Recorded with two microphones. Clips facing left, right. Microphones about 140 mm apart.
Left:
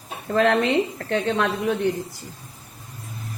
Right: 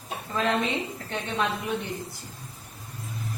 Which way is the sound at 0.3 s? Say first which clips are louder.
Left 8 dB; 80° left.